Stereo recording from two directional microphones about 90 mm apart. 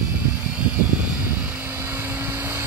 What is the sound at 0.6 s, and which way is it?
Vehicle, 15° right (ahead or behind).